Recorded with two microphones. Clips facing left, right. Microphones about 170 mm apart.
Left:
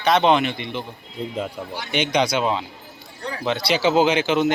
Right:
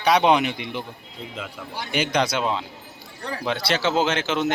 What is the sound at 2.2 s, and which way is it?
Speech, 5° left (ahead or behind).